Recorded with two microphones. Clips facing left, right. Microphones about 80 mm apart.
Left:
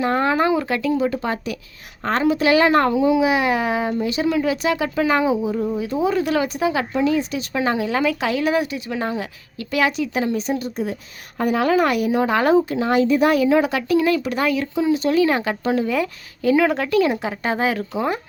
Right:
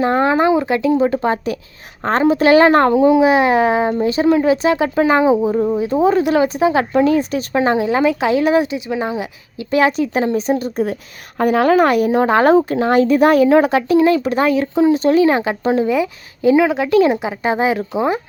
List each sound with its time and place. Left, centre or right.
0.0 s a woman's voice: right
6.9 s speech: right
7.6 s a woman's voice: right
9.6 s a woman's voice: right
11.3 s a woman's voice: right; by 16.6 s centre
16.6 s a woman's voice: centre
16.9 s speech: right
17.2 s speech: centre